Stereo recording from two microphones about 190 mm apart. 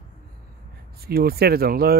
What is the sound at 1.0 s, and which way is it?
Speech, 55° right (ahead or behind).